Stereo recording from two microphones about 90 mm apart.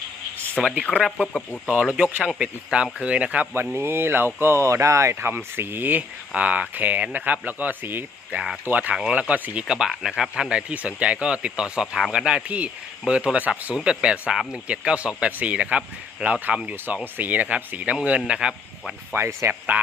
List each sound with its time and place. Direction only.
0.6 s speech: 5° right (ahead or behind)
1.2 s speech: 10° left (ahead or behind)
1.6 s speech: 10° right (ahead or behind)
3.8 s speech: 25° right (ahead or behind); by 18.9 s 10° right (ahead or behind)
19.1 s speech: 30° right (ahead or behind)